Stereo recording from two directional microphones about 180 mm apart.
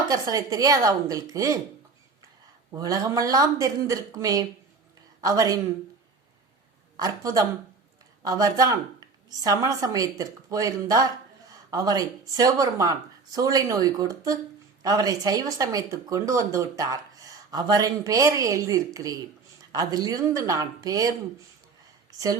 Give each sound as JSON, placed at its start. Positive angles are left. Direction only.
{"t": 0.1, "sound": "speech", "side_deg": -20}
{"t": 2.7, "sound": "speech", "side_deg": -20}
{"t": 6.9, "sound": "speech", "side_deg": -20}